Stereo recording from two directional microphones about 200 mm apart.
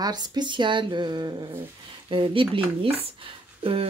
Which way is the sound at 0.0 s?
20° right (ahead or behind).